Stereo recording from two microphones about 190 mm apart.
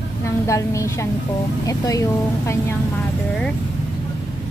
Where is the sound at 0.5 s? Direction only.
15° left (ahead or behind).